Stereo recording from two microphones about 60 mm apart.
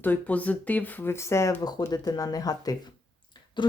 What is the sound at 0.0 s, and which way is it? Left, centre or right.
Speech, left.